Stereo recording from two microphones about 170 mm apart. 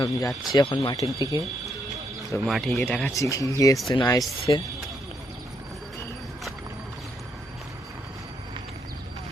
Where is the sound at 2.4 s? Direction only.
Centre (ahead or behind); by 4.6 s 25° left (ahead or behind).